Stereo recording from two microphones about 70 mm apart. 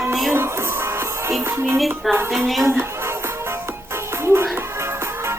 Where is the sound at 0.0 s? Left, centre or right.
Centre.